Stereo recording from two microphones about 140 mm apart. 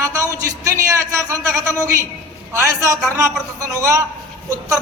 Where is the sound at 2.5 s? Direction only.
20° right (ahead or behind).